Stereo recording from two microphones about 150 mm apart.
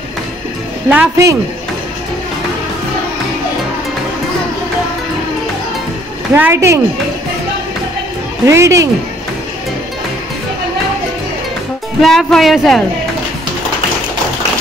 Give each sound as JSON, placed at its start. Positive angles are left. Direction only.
{"t": 0.8, "sound": "speech", "side_deg": -10}
{"t": 6.3, "sound": "speech", "side_deg": -15}
{"t": 8.5, "sound": "speech", "side_deg": -20}
{"t": 12.0, "sound": "speech", "side_deg": 0}